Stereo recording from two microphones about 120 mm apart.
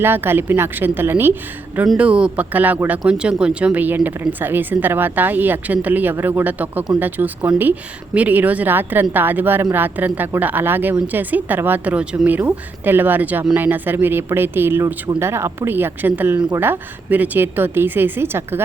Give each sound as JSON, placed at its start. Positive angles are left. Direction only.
{"t": 0.0, "sound": "a woman's voice", "side_deg": -20}